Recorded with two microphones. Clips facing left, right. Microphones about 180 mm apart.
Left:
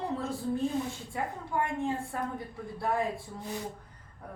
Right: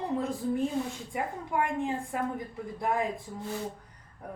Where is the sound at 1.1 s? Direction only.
15° right (ahead or behind).